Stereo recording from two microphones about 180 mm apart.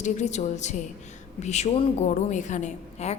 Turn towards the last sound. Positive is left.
turn(degrees=40)  # may be behind; listen again after turning